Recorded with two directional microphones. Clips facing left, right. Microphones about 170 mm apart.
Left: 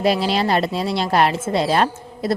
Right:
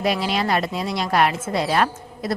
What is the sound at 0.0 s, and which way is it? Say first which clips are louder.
Speech: left 4 dB; 30° left (ahead or behind).